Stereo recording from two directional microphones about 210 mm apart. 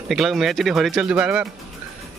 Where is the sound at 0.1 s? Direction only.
Centre (ahead or behind).